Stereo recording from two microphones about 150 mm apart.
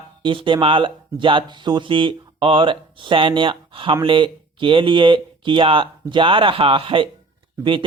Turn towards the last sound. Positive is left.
turn(degrees=-35)  # may be behind; listen again after turning